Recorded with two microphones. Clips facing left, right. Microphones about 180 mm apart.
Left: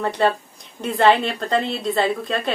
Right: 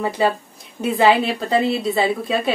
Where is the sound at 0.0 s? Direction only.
5° right (ahead or behind).